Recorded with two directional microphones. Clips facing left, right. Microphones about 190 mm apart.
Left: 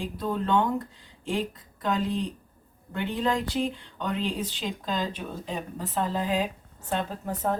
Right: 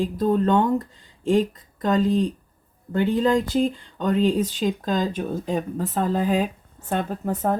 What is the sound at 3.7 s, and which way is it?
Speech, 40° right (ahead or behind).